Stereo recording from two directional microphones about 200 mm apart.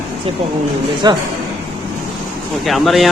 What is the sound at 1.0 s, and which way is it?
Speech, 20° right (ahead or behind).